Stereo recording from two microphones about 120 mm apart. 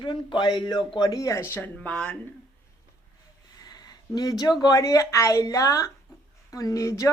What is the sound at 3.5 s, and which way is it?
Speech, 35° left (ahead or behind).